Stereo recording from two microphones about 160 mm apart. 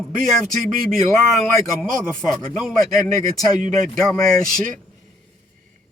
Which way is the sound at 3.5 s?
50° right (ahead or behind).